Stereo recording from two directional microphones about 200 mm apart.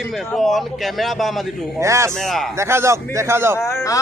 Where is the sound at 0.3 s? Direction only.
Centre (ahead or behind).